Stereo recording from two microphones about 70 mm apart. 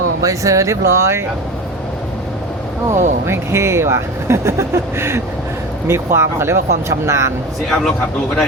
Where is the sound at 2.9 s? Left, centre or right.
Right.